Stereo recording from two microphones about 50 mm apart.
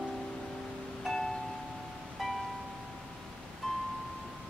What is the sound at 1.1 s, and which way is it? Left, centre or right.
Music, centre.